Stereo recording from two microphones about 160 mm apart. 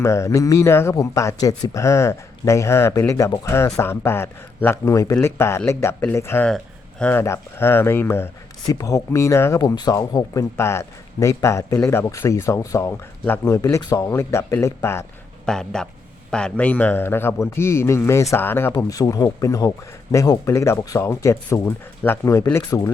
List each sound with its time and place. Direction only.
0.0 s speech: 20° left (ahead or behind)
15.4 s speech: 5° left (ahead or behind)